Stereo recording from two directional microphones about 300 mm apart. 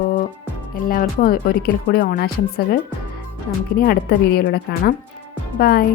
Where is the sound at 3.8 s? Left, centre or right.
Left.